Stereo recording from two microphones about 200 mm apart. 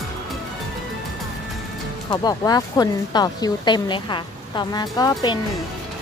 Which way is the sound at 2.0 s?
20° left (ahead or behind).